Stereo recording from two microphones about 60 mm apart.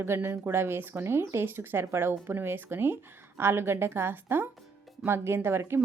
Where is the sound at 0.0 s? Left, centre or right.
Right.